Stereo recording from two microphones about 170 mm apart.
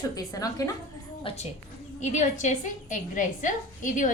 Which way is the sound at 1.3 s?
30° left (ahead or behind).